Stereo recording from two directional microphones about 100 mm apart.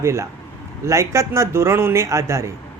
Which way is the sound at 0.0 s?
25° right (ahead or behind).